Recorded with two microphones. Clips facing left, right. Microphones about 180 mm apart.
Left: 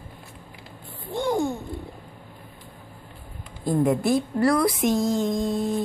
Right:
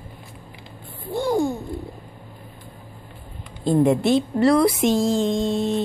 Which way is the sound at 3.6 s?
25° right (ahead or behind).